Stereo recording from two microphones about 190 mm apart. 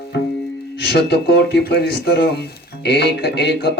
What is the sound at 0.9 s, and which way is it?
Speech, 60° left (ahead or behind).